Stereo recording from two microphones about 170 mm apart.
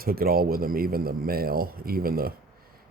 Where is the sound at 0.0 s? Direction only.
60° right (ahead or behind).